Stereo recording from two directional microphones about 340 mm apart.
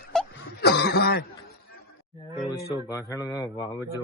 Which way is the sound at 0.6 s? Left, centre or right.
Left.